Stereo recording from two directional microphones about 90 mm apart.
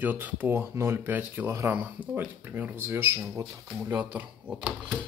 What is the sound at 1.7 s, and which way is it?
Speech, 20° right (ahead or behind).